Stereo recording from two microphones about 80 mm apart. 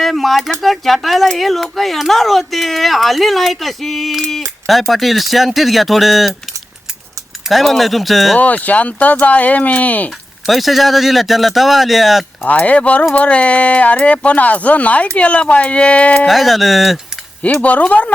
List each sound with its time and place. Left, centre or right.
0.0 s a sound: centre
0.6 s speech: centre
7.4 s speech: centre
8.4 s speech: centre
10.4 s speech: centre
12.4 s speech: centre
16.2 s speech: centre
17.4 s speech: centre